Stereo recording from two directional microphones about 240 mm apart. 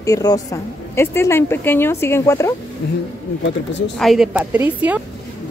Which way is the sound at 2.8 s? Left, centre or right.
Left.